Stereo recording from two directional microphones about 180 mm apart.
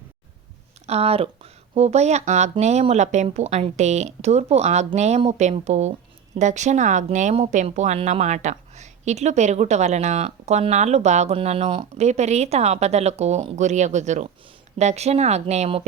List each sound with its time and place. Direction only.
0.9 s speech: 35° right (ahead or behind)